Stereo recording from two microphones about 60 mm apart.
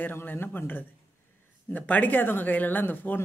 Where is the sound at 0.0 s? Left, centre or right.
Left.